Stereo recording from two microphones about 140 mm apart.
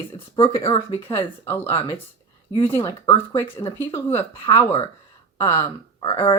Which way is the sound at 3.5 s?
25° left (ahead or behind).